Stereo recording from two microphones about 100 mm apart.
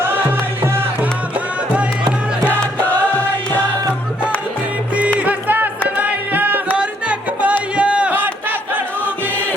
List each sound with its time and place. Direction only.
0.0 s music: 20° right (ahead or behind)
5.2 s music: 15° right (ahead or behind)
7.8 s a sound: 10° right (ahead or behind)